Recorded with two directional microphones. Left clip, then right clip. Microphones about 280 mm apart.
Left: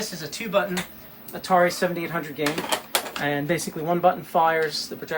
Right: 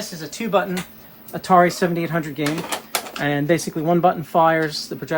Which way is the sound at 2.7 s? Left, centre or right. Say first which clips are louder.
Left 1 dB; centre.